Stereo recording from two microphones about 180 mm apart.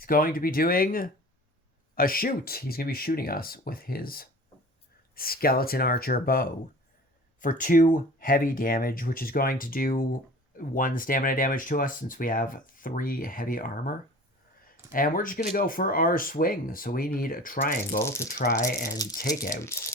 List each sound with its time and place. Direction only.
0.0 s speech: 55° left (ahead or behind)
18.0 s speech: 15° left (ahead or behind)
18.3 s speech: 50° left (ahead or behind)
19.7 s speech: 15° left (ahead or behind)